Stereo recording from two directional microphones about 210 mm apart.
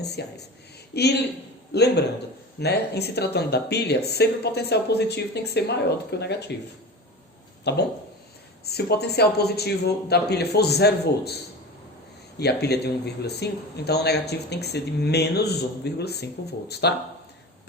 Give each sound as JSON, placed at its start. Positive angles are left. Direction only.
{"t": 0.0, "sound": "speech", "side_deg": 50}
{"t": 7.6, "sound": "speech", "side_deg": 50}
{"t": 12.4, "sound": "speech", "side_deg": 50}